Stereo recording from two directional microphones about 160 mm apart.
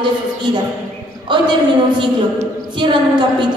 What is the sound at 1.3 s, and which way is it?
Speech, 30° right (ahead or behind).